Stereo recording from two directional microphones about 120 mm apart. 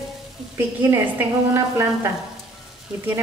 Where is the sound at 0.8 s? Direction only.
20° right (ahead or behind).